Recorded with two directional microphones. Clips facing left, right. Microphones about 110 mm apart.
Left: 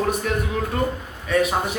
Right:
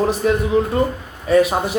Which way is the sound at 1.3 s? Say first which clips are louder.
Right 6 dB; 35° right (ahead or behind).